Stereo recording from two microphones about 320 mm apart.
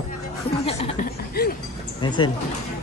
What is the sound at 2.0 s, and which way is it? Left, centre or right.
Speech, centre.